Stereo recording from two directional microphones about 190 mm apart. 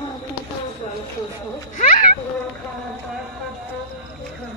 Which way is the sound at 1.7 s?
45° left (ahead or behind).